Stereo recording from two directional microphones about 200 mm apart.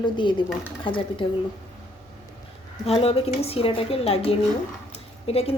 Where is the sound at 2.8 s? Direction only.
30° left (ahead or behind).